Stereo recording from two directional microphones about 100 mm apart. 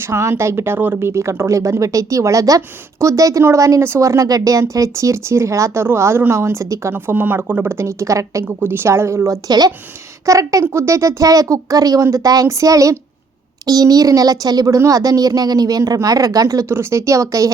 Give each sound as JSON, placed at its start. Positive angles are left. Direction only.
{"t": 0.0, "sound": "a woman's voice", "side_deg": -25}
{"t": 8.4, "sound": "a woman's voice", "side_deg": -20}